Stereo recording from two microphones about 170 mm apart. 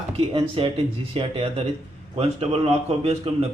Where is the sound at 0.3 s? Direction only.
30° right (ahead or behind).